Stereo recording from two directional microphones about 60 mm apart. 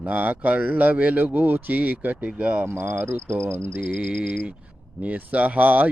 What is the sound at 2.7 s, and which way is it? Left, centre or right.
Speech, right.